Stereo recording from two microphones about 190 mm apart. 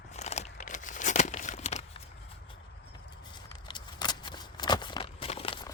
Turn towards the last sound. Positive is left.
turn(degrees=30)  # may be behind; listen again after turning